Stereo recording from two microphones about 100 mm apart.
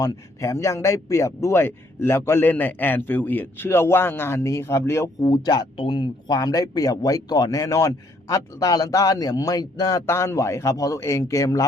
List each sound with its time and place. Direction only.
0.0 s speech: 30° left (ahead or behind)
5.3 s a man's voice: 45° left (ahead or behind)
10.1 s a man's voice: 30° left (ahead or behind)